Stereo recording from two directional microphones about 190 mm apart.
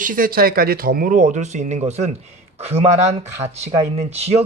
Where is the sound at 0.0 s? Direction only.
45° right (ahead or behind).